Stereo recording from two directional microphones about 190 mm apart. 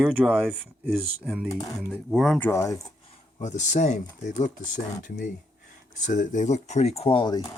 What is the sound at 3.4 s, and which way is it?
Speech, 40° left (ahead or behind).